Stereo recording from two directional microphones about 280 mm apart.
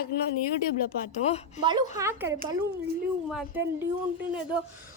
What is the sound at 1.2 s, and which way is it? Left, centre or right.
Speech, left.